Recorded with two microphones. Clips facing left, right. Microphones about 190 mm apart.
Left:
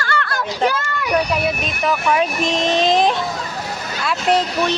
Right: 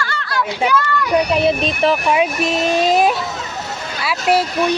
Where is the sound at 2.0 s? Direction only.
15° right (ahead or behind).